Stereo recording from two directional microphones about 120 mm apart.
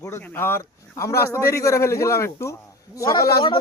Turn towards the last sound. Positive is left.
turn(degrees=30)  # may be behind; listen again after turning